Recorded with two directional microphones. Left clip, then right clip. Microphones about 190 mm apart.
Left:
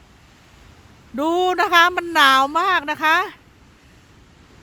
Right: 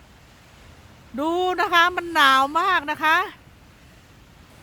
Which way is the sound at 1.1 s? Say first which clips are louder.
Left 4 dB; 30° left (ahead or behind).